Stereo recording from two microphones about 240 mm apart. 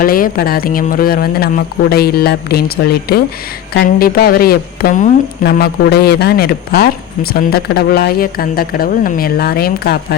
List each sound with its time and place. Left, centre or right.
0.0 s speech: left